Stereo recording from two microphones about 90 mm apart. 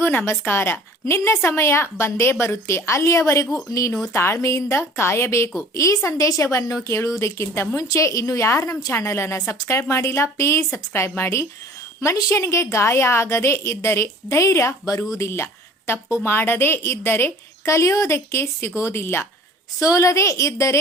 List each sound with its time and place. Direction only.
0.0 s a woman's voice: 25° left (ahead or behind)